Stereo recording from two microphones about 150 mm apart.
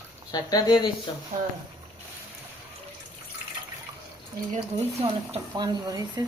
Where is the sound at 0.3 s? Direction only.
25° left (ahead or behind).